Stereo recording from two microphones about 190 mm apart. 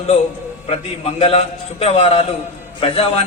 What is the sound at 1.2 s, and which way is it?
A man's voice, 30° left (ahead or behind).